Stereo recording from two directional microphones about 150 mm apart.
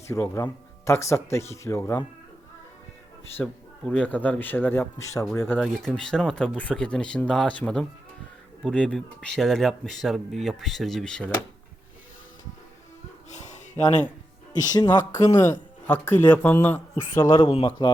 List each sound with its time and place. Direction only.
0.1 s speech: 20° left (ahead or behind)
3.4 s speech: 5° left (ahead or behind)
5.5 s speech: centre (ahead or behind)
13.3 s a sound: 50° left (ahead or behind)
14.8 s speech: 25° left (ahead or behind)
17.4 s speech: 40° left (ahead or behind)
17.7 s speech: 25° left (ahead or behind)